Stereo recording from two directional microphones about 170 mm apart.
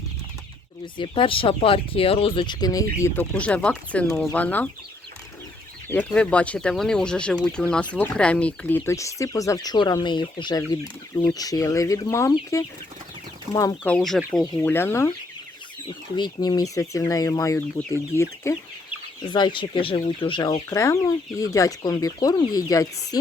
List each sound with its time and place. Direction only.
0.9 s speech: 30° left (ahead or behind); by 4.7 s 10° left (ahead or behind)
5.9 s speech: 10° left (ahead or behind)
13.8 s speech: 5° left (ahead or behind)
14.6 s speech: 15° left (ahead or behind)
16.1 s speech: 25° left (ahead or behind)
19.2 s speech: 25° left (ahead or behind)
20.7 s speech: 15° left (ahead or behind)